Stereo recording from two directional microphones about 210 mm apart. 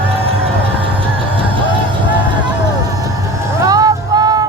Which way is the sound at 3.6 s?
15° right (ahead or behind).